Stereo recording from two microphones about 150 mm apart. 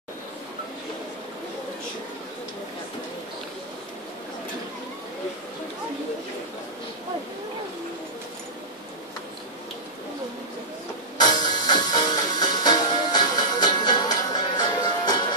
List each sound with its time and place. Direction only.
11.1 s music: 25° left (ahead or behind)